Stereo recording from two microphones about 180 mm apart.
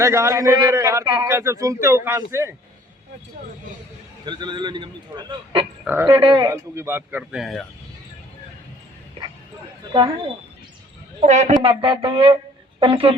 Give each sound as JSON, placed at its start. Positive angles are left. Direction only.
{"t": 0.0, "sound": "a man's voice", "side_deg": -15}
{"t": 4.3, "sound": "a man's voice", "side_deg": -25}
{"t": 5.8, "sound": "speech", "side_deg": -10}
{"t": 6.1, "sound": "a man's voice", "side_deg": -25}
{"t": 11.2, "sound": "a man's voice", "side_deg": -40}